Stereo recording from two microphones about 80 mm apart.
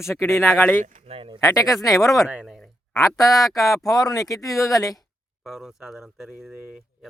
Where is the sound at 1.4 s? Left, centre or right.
Left.